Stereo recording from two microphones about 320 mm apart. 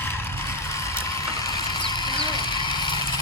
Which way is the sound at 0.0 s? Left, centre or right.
Centre.